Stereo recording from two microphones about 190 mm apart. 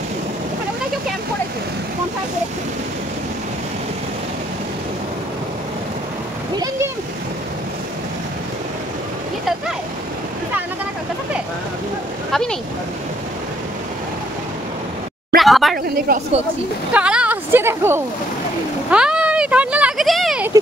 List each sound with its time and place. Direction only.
12.3 s a sound: 5° left (ahead or behind)
15.3 s speech: centre (ahead or behind)
16.1 s speech: 50° right (ahead or behind)
16.9 s speech: 5° right (ahead or behind)